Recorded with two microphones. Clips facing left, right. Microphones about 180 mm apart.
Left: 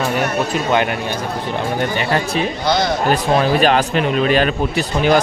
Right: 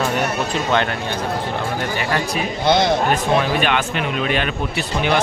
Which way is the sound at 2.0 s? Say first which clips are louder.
Left 3 dB; 25° left (ahead or behind).